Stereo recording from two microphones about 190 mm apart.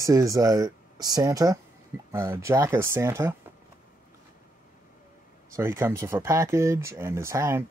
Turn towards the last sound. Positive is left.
turn(degrees=-15)  # may be behind; listen again after turning